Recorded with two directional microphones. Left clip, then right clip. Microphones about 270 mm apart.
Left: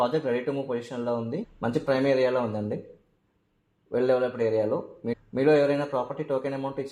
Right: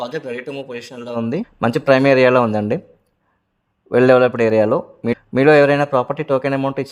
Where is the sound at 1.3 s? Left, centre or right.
Right.